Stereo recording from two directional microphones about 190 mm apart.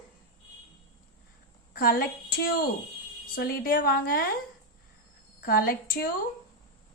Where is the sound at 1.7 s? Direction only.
50° left (ahead or behind).